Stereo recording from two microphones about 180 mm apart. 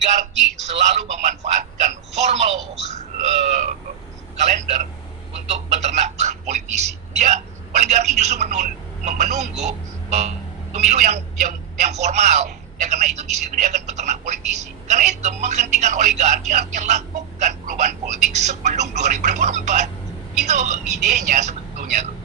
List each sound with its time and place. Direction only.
0.0 s speech: 40° right (ahead or behind)
0.3 s a man's voice: centre (ahead or behind)
0.6 s telephone: 40° right (ahead or behind)
4.4 s a sound: 40° right (ahead or behind)
7.2 s a woman's voice: 40° right (ahead or behind)